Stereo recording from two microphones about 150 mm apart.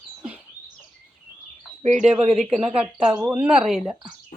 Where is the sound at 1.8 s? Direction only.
50° right (ahead or behind).